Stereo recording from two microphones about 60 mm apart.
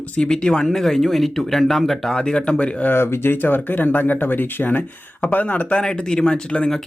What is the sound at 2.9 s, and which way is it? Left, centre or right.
Speech, left.